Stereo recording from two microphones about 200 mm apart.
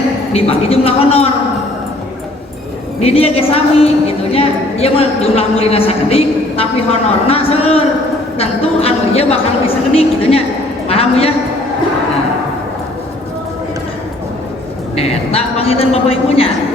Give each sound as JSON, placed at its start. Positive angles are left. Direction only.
{"t": 0.3, "sound": "a woman's voice", "side_deg": 30}
{"t": 3.0, "sound": "a woman's voice", "side_deg": 30}
{"t": 14.9, "sound": "a woman's voice", "side_deg": 30}